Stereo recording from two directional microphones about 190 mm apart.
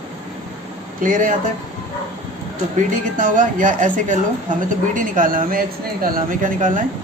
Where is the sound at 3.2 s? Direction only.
45° right (ahead or behind).